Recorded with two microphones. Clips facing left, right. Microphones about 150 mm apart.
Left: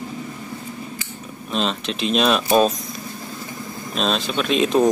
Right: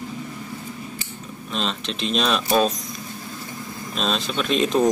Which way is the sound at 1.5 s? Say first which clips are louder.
Left 4 dB; 5° left (ahead or behind).